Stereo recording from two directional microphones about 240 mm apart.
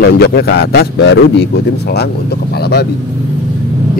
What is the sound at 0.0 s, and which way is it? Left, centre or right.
Speech, left.